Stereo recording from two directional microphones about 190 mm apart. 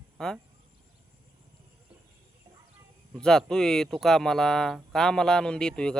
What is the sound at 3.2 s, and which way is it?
Speech, 5° left (ahead or behind).